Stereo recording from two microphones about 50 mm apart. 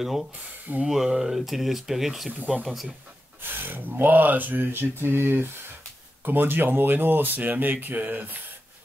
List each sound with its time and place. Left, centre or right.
0.0 s speech: centre
3.4 s a sound: right
4.0 s speech: right